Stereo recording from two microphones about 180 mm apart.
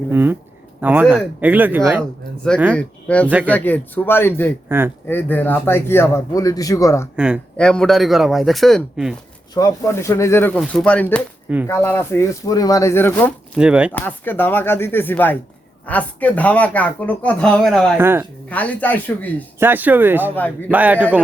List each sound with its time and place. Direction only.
0.1 s speech: 10° right (ahead or behind)
2.7 s speech: 5° left (ahead or behind)
3.2 s speech: 10° right (ahead or behind)
3.5 s speech: 10° left (ahead or behind)
7.5 s speech: 5° left (ahead or behind)
9.6 s speech: 15° left (ahead or behind)
13.6 s speech: 5° right (ahead or behind)
13.9 s speech: 10° left (ahead or behind)
17.9 s speech: 10° right (ahead or behind)
18.4 s speech: 10° left (ahead or behind)
19.5 s speech: 10° right (ahead or behind)
20.3 s speech: 10° left (ahead or behind)
20.7 s speech: 10° right (ahead or behind)